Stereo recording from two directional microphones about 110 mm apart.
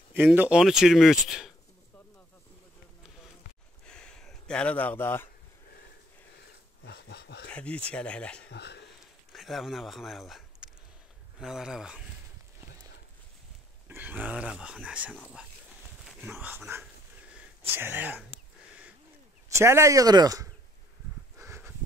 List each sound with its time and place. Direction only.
0.1 s speech: 15° right (ahead or behind)
0.6 s speech: 5° right (ahead or behind)
3.8 s a sound: 5° left (ahead or behind)
7.4 s speech: 10° left (ahead or behind)
9.3 s speech: centre (ahead or behind)
13.8 s speech: 15° right (ahead or behind)
16.2 s speech: 20° right (ahead or behind)
17.3 s a sound: 15° right (ahead or behind)
19.6 s speech: 25° right (ahead or behind)
21.4 s a sound: 25° right (ahead or behind)